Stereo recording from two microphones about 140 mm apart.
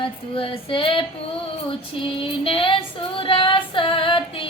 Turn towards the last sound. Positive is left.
turn(degrees=40)  # may be behind; listen again after turning